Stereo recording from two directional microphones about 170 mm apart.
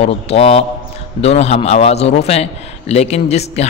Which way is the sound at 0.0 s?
35° left (ahead or behind).